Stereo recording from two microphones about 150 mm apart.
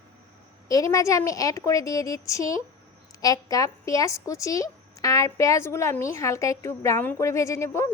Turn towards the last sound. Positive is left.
turn(degrees=20)  # may be behind; listen again after turning